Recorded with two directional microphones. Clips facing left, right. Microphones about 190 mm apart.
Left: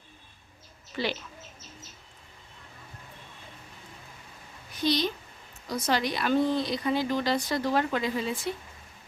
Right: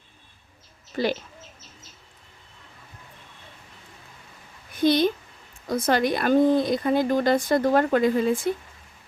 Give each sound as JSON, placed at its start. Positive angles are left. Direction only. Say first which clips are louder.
{"t": 0.9, "sound": "speech", "louder": "right 6 dB", "side_deg": -40}
{"t": 4.7, "sound": "a child's voice", "louder": "right 7 dB", "side_deg": -55}